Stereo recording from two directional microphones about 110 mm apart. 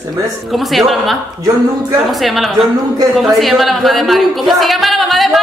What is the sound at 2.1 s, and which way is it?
A woman's voice, centre (ahead or behind).